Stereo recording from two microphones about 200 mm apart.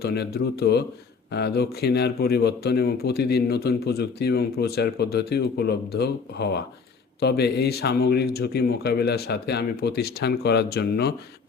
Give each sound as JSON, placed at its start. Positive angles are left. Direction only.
{"t": 0.0, "sound": "speech", "side_deg": 50}